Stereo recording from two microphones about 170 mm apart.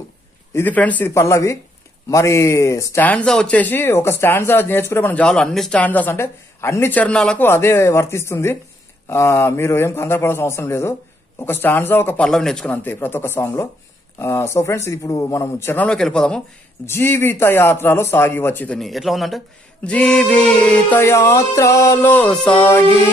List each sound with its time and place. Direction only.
0.5 s speech: 10° left (ahead or behind)